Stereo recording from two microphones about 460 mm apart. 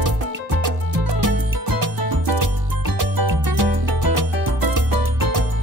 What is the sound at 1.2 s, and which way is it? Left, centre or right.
Music, right.